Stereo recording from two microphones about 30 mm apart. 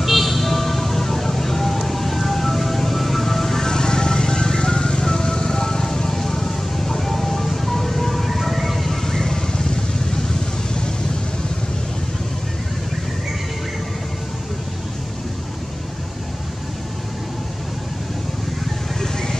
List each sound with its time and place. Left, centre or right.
0.0 s vehicle: centre
3.6 s music: left; by 8.9 s centre
9.0 s vehicle: centre